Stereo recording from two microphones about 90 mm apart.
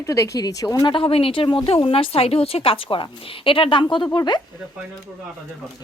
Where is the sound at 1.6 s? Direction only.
90° left; by 4.0 s 65° left (ahead or behind).